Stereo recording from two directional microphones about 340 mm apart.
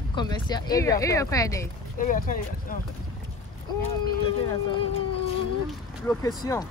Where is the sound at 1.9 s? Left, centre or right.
Left.